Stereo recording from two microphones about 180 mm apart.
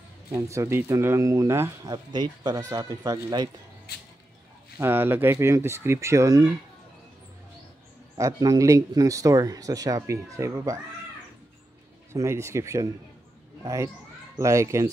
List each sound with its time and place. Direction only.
0.3 s speech: 15° right (ahead or behind)
3.9 s a sound: 65° left (ahead or behind)
4.7 s speech: 10° right (ahead or behind)
8.2 s speech: 20° right (ahead or behind)
12.1 s speech: 15° right (ahead or behind)
14.4 s speech: 15° right (ahead or behind)